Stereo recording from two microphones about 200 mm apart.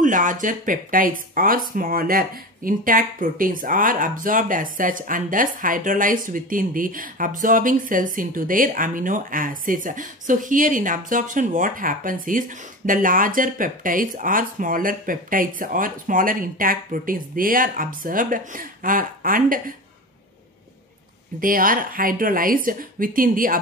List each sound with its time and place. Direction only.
0.0 s speech: 40° right (ahead or behind)
21.4 s speech: 45° right (ahead or behind)